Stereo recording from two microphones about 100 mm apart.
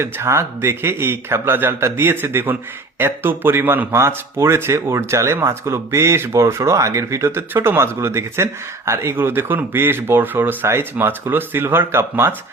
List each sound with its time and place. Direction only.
0.0 s speech: 25° right (ahead or behind)